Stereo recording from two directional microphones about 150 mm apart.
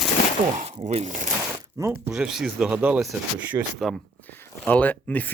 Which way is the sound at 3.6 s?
25° right (ahead or behind).